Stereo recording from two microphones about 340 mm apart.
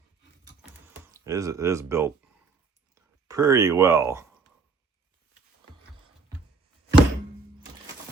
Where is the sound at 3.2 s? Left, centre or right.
Centre.